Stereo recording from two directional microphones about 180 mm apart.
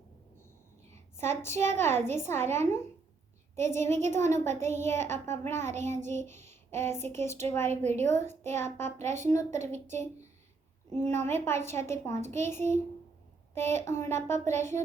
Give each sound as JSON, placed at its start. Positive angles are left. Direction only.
{"t": 0.9, "sound": "speech", "side_deg": 15}
{"t": 7.7, "sound": "a woman's voice", "side_deg": -40}
{"t": 8.0, "sound": "speech", "side_deg": 15}
{"t": 10.9, "sound": "speech", "side_deg": 15}